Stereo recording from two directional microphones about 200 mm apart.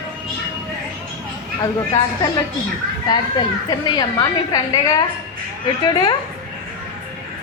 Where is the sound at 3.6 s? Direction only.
20° left (ahead or behind).